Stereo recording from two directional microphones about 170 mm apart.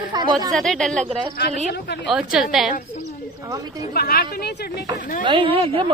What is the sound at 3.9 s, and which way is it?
Speech, 65° left (ahead or behind).